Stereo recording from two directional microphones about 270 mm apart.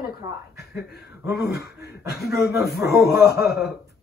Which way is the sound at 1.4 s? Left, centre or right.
Left.